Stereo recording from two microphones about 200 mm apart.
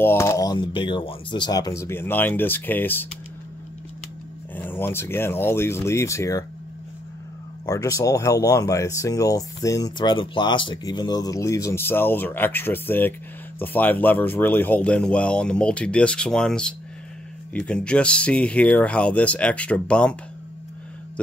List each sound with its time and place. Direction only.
0.0 s speech: 10° left (ahead or behind)
4.6 s speech: 10° left (ahead or behind)
7.6 s speech: 15° left (ahead or behind)